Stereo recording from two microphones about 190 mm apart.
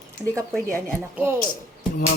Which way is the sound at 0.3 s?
5° left (ahead or behind).